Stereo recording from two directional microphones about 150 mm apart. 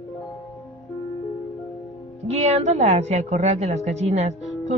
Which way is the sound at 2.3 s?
50° right (ahead or behind).